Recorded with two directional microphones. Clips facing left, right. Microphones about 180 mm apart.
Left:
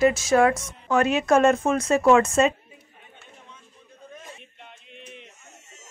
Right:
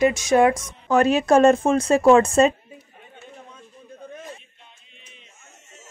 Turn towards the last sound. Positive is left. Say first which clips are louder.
# left 10 dB
turn(degrees=65)  # may be behind; listen again after turning